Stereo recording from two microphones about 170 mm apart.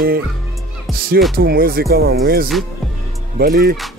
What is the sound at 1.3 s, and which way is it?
Speech, 60° right (ahead or behind).